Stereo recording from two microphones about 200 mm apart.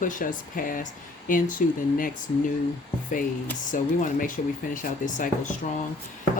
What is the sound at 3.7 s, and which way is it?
Speech, 40° left (ahead or behind).